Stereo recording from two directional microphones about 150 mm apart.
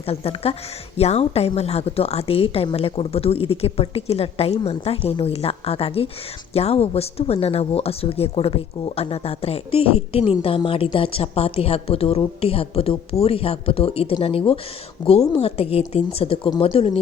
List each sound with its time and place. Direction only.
0.0 s a woman's voice: 40° left (ahead or behind)